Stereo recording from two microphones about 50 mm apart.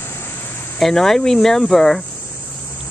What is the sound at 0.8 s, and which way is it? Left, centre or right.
Speech, centre.